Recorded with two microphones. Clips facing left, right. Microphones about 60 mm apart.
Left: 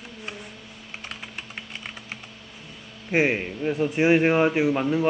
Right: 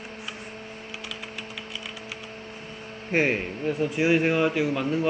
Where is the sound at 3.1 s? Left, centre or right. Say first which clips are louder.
Left 2 dB; centre.